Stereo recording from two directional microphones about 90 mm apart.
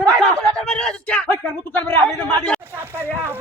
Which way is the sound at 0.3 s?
5° left (ahead or behind).